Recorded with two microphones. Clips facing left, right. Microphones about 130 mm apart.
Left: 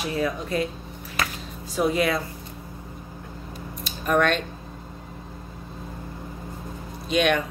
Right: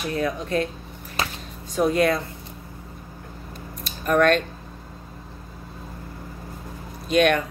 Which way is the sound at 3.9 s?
Centre (ahead or behind).